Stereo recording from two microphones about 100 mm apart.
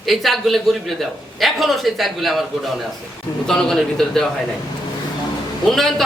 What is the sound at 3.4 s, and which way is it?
Speech, 5° left (ahead or behind).